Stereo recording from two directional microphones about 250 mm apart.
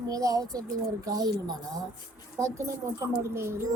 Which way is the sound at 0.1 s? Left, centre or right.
Centre.